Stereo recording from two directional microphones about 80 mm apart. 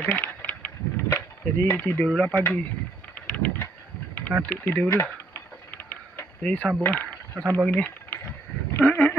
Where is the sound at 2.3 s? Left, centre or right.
Left.